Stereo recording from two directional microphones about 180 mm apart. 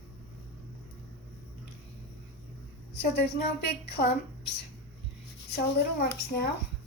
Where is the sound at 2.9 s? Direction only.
65° left (ahead or behind).